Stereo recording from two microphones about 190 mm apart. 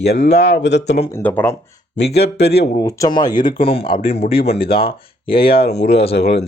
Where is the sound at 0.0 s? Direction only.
60° left (ahead or behind).